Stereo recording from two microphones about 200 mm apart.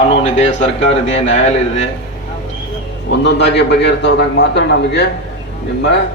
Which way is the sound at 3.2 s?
60° left (ahead or behind).